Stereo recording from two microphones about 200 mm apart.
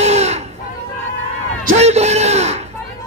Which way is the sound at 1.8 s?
35° right (ahead or behind).